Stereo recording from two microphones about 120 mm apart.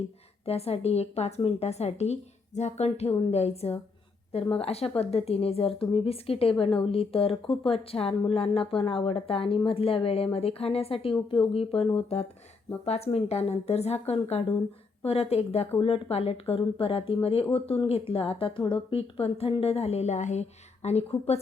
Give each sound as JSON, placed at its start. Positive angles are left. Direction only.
{"t": 0.4, "sound": "a woman's voice", "side_deg": 55}